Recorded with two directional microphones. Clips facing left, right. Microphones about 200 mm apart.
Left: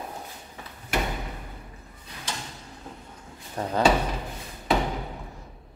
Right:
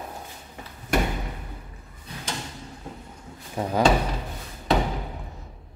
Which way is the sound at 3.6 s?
10° right (ahead or behind).